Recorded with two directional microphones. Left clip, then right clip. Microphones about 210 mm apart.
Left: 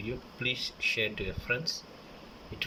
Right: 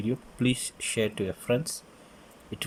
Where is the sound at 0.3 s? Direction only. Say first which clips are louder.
Even; 30° right (ahead or behind).